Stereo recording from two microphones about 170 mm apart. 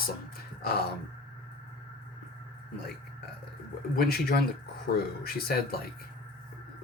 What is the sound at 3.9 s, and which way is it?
Speech, 65° left (ahead or behind).